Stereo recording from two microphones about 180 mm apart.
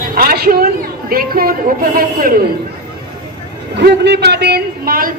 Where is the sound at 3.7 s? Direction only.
70° right (ahead or behind); by 5.1 s 55° right (ahead or behind).